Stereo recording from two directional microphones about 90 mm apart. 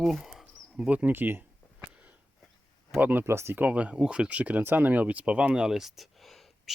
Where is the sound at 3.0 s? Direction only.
20° right (ahead or behind).